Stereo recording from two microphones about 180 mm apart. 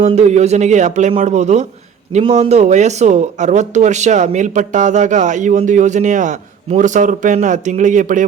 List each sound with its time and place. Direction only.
0.0 s speech: 40° right (ahead or behind)